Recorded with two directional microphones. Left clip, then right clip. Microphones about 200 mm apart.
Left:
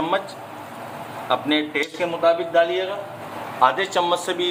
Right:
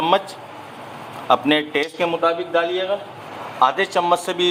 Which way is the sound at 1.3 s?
55° right (ahead or behind).